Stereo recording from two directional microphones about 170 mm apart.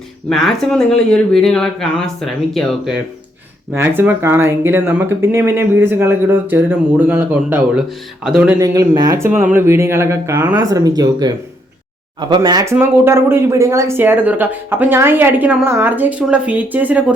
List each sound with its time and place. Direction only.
0.3 s speech: centre (ahead or behind)
3.7 s speech: 10° right (ahead or behind)
8.5 s speech: 20° right (ahead or behind)